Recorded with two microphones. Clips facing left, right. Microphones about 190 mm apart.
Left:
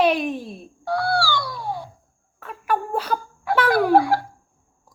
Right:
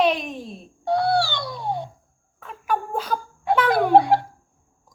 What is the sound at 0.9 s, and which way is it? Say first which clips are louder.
Bird: right 2 dB; 20° right (ahead or behind).